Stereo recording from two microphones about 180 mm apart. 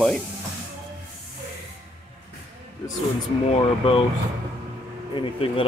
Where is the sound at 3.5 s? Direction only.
30° left (ahead or behind).